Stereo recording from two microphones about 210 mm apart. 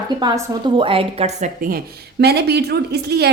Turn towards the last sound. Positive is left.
turn(degrees=-50)  # may be behind; listen again after turning